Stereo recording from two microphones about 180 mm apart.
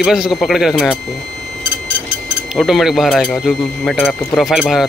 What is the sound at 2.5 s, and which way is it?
Speech, centre (ahead or behind).